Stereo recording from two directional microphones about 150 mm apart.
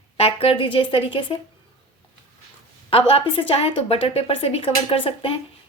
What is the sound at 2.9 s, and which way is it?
Speech, 40° left (ahead or behind).